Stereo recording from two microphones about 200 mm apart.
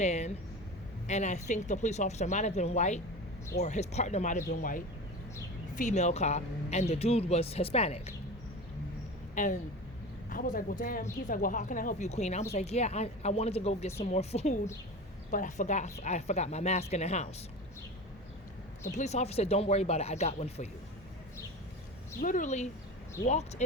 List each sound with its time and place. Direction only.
0.0 s speech: 35° left (ahead or behind)
9.3 s speech: 40° left (ahead or behind)
18.9 s speech: 35° left (ahead or behind)
22.2 s speech: 40° left (ahead or behind)